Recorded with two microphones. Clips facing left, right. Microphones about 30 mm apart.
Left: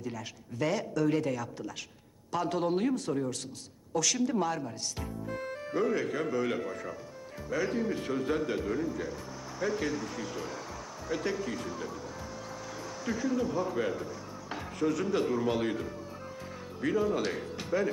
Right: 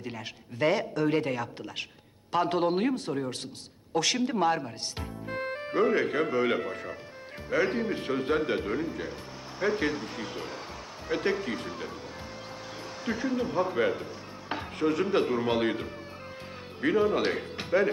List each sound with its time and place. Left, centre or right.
0.6 s a man's voice: right
13.1 s a man's voice: right